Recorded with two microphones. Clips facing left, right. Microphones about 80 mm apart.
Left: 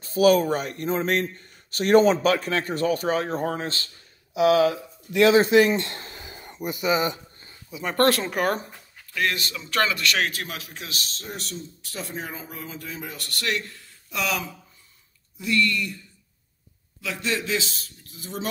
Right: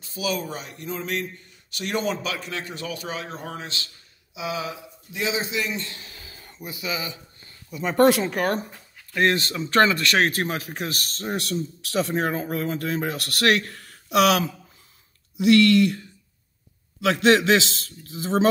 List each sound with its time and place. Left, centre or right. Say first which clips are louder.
0.0 s a man's voice: left 10 dB; left
5.1 s a man's voice: left 11 dB; left
6.0 s a sound: left 5 dB; left
6.5 s speech: left 7 dB; left
7.7 s speech: right 3 dB; centre
9.1 s a man's voice: right 5 dB; right